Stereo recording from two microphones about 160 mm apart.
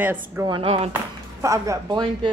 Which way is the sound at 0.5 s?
35° right (ahead or behind).